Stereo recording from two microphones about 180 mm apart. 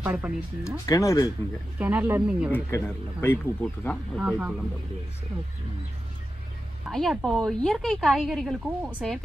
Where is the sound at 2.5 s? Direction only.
10° left (ahead or behind).